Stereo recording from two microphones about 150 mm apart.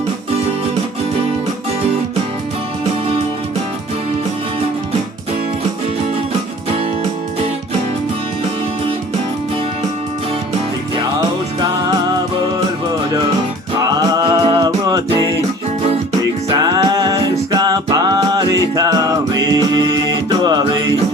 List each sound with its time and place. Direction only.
13.8 s music: 25° right (ahead or behind)
14.3 s music: 35° right (ahead or behind)
16.5 s music: 25° right (ahead or behind)